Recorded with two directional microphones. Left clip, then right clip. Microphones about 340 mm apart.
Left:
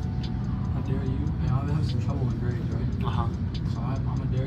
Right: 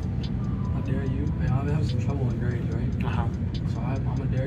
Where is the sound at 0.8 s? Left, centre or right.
Centre.